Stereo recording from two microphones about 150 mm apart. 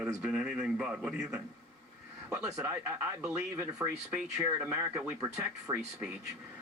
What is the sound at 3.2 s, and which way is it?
Speech, 15° right (ahead or behind).